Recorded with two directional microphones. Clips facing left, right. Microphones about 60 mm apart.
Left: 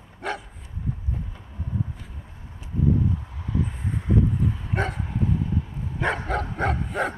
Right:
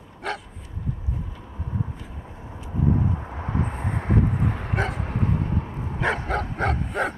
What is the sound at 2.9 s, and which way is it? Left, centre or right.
Vehicle, right.